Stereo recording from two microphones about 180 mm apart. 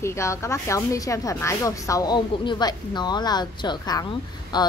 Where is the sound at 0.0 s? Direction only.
15° left (ahead or behind).